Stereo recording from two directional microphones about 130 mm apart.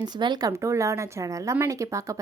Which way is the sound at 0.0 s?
35° right (ahead or behind).